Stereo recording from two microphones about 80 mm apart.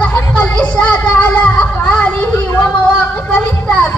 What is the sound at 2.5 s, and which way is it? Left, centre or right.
Speech, left.